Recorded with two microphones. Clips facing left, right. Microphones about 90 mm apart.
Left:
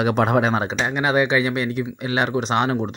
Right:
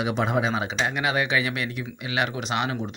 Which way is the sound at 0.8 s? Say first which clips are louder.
Left 6 dB; 35° left (ahead or behind).